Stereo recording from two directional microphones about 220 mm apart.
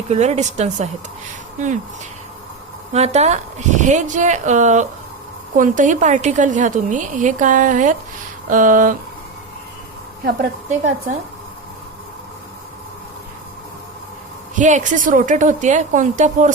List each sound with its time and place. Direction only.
0.1 s a woman's voice: 30° right (ahead or behind)
2.9 s a woman's voice: 30° right (ahead or behind)
14.5 s a woman's voice: 35° right (ahead or behind)